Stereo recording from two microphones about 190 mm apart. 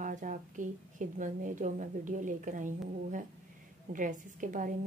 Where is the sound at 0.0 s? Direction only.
45° right (ahead or behind).